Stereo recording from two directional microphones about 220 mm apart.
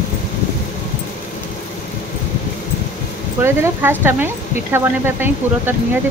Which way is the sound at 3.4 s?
10° right (ahead or behind).